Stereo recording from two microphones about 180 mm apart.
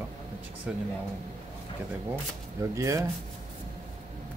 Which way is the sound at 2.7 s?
15° right (ahead or behind).